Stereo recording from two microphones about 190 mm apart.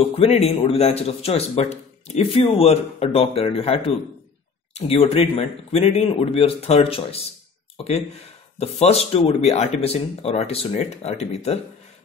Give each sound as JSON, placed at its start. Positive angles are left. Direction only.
{"t": 0.0, "sound": "speech", "side_deg": 30}